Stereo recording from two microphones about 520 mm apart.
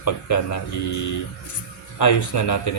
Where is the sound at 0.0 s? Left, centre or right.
Left.